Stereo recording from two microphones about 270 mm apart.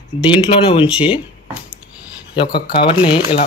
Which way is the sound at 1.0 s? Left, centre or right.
Centre.